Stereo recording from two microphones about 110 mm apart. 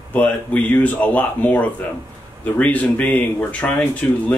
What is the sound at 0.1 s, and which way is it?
Speech, 15° left (ahead or behind).